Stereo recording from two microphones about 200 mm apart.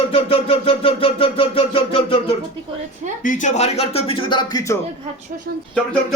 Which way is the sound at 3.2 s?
40° left (ahead or behind).